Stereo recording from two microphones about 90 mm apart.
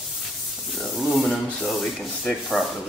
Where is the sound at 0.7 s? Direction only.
Centre (ahead or behind).